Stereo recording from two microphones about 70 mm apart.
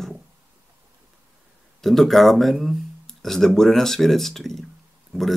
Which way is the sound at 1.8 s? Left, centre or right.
Centre.